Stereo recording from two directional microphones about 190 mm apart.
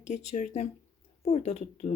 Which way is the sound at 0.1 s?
40° left (ahead or behind).